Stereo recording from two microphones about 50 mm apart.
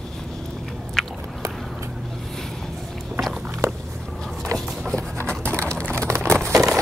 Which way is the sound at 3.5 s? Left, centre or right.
Right.